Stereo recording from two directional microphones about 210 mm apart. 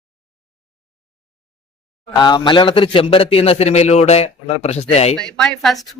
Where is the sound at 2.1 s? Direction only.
20° left (ahead or behind).